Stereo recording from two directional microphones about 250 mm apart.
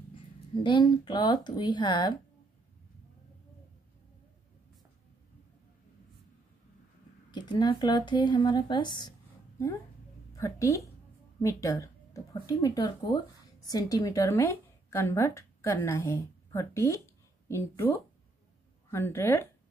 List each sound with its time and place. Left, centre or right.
0.7 s speech: centre
7.2 s speech: centre
10.3 s a woman's voice: centre